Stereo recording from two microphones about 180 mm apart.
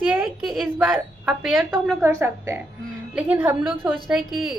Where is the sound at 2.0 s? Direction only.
15° right (ahead or behind).